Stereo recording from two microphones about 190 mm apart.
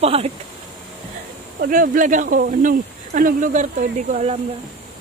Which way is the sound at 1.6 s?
45° right (ahead or behind).